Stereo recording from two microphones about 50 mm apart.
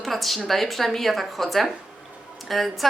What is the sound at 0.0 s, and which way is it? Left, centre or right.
A woman's voice, centre.